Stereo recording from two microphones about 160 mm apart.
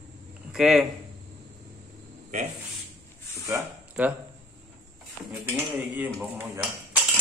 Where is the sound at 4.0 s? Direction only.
5° right (ahead or behind).